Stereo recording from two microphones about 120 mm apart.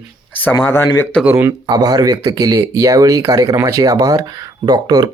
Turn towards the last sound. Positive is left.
turn(degrees=-35)  # may be behind; listen again after turning